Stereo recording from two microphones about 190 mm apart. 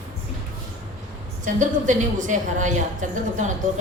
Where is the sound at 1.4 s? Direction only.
40° right (ahead or behind).